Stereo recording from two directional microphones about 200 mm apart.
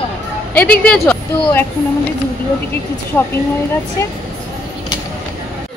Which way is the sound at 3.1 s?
10° left (ahead or behind).